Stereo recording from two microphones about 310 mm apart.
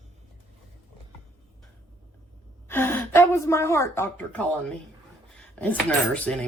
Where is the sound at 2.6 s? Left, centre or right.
Centre.